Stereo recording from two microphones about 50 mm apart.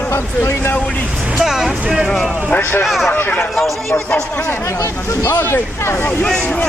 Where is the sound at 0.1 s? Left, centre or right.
Left.